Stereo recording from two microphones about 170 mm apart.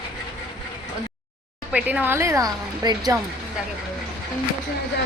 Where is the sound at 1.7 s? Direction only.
10° right (ahead or behind).